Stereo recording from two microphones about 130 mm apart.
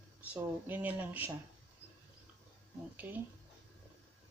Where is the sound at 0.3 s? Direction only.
15° right (ahead or behind).